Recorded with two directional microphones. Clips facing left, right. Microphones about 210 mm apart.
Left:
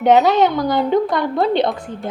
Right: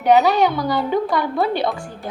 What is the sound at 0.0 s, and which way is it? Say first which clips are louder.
A woman's voice: left 2 dB; 20° left (ahead or behind).